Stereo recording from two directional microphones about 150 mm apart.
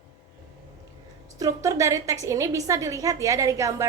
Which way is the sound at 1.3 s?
25° right (ahead or behind).